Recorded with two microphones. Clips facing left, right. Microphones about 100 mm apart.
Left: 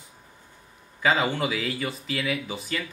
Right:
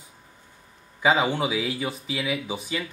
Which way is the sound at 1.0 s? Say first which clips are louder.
Right 2 dB; 15° right (ahead or behind).